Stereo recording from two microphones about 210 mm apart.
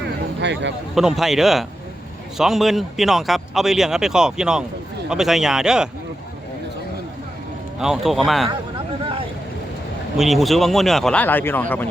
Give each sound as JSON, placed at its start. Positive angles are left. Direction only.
{"t": 0.3, "sound": "a sound", "side_deg": -55}
{"t": 0.9, "sound": "a man's voice", "side_deg": 0}
{"t": 7.8, "sound": "a man's voice", "side_deg": 0}
{"t": 10.2, "sound": "a man's voice", "side_deg": 0}